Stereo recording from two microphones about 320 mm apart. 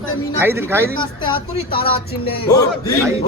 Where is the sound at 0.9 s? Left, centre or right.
Centre.